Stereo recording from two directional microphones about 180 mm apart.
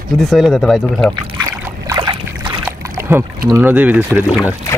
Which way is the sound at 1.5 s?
20° right (ahead or behind).